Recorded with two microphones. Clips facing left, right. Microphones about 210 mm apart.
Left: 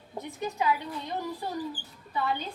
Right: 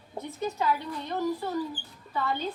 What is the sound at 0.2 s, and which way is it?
Speech, 15° left (ahead or behind).